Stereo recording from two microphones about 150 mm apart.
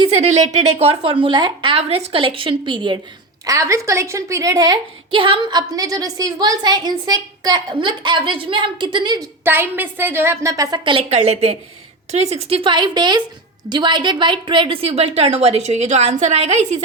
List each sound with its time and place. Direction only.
0.0 s a woman's voice: 50° right (ahead or behind); by 3.0 s 30° right (ahead or behind)
3.4 s a woman's voice: 20° right (ahead or behind); by 16.8 s 50° right (ahead or behind)